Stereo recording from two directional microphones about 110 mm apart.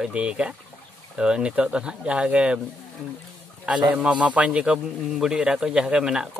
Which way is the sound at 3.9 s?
10° right (ahead or behind).